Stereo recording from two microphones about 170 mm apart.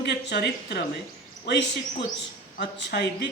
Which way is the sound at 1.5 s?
90° left.